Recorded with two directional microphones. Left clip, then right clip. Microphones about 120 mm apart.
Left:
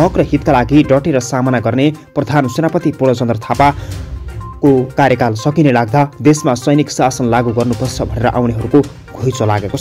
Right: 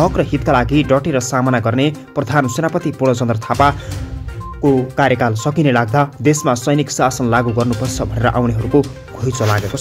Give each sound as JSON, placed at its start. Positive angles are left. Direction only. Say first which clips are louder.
{"t": 0.0, "sound": "speech", "louder": "left 3 dB", "side_deg": 25}
{"t": 4.9, "sound": "speech", "louder": "left 3 dB", "side_deg": 35}